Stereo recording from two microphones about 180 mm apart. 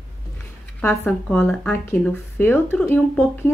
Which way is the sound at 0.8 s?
10° left (ahead or behind).